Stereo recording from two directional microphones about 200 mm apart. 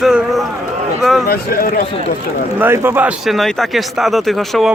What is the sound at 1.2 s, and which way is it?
Speech, 50° left (ahead or behind).